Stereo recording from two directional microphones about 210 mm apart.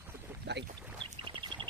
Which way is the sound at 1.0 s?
25° right (ahead or behind).